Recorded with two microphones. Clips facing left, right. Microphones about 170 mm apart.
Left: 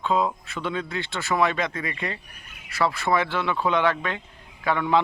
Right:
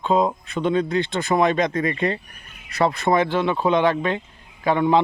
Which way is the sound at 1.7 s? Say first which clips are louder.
Right 9 dB; 40° right (ahead or behind).